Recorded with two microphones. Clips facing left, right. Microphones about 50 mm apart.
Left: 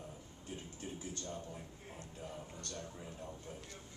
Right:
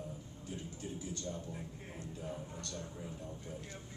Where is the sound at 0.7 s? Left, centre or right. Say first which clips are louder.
Right 2 dB; left.